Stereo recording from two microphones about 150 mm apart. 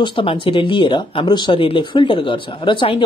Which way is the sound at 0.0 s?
35° left (ahead or behind).